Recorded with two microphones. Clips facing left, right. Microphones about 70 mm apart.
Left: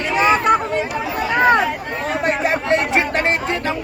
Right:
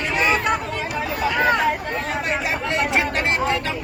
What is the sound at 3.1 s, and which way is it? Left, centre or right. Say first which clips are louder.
Speech: left 2 dB; left.